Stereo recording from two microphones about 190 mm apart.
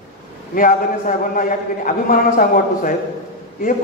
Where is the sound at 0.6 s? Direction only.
45° left (ahead or behind).